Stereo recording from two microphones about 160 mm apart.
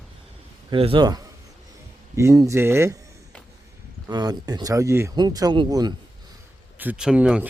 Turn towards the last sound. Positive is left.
turn(degrees=-5)  # may be behind; listen again after turning